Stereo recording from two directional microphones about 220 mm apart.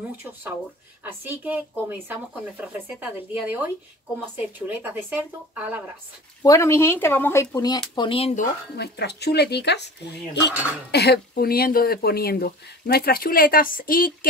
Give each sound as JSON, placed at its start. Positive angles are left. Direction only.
{"t": 0.2, "sound": "speech", "side_deg": -10}
{"t": 6.4, "sound": "speech", "side_deg": 15}
{"t": 8.7, "sound": "speech", "side_deg": 50}
{"t": 10.9, "sound": "speech", "side_deg": 45}